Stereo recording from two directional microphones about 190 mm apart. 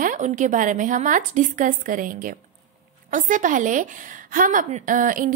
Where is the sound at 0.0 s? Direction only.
40° right (ahead or behind).